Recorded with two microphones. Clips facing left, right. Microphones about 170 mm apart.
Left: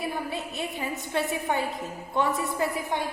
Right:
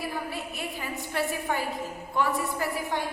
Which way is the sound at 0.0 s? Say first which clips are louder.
Left 2 dB; 20° left (ahead or behind).